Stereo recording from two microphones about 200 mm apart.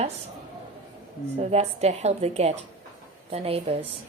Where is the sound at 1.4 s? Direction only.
35° right (ahead or behind).